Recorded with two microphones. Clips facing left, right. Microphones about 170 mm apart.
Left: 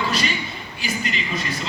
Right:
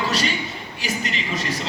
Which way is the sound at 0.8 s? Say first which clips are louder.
Even; 85° right.